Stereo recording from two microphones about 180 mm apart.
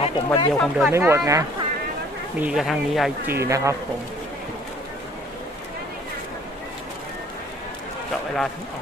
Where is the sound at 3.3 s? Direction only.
15° right (ahead or behind).